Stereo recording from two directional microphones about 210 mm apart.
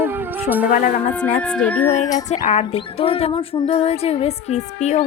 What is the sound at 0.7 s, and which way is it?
Speech, 40° left (ahead or behind).